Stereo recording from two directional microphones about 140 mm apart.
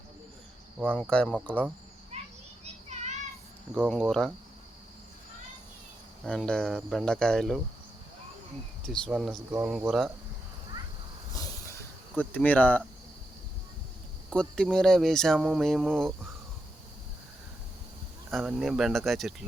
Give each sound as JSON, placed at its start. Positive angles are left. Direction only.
{"t": 1.1, "sound": "speech", "side_deg": 5}
{"t": 2.9, "sound": "child singing", "side_deg": -55}
{"t": 3.8, "sound": "speech", "side_deg": 0}
{"t": 6.2, "sound": "speech", "side_deg": 5}
{"t": 8.8, "sound": "speech", "side_deg": 0}
{"t": 9.5, "sound": "speech", "side_deg": -10}
{"t": 11.3, "sound": "a sound", "side_deg": 20}
{"t": 12.1, "sound": "speech", "side_deg": 10}
{"t": 14.3, "sound": "speech", "side_deg": 5}
{"t": 18.3, "sound": "speech", "side_deg": 0}